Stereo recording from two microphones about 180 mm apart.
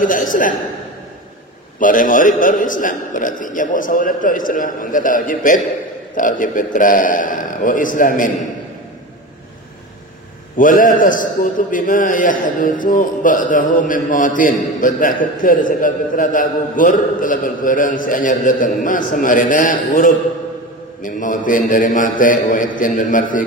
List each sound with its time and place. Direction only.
0.0 s a man's voice: 50° left (ahead or behind)
1.8 s a man's voice: 50° left (ahead or behind)
10.6 s a man's voice: 50° left (ahead or behind)